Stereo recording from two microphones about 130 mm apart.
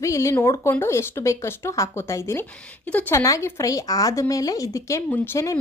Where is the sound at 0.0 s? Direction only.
25° left (ahead or behind).